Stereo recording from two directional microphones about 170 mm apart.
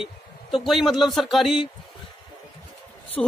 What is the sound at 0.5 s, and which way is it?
Speech, centre (ahead or behind).